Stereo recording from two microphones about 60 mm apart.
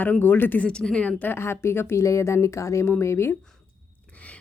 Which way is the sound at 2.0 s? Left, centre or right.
Left.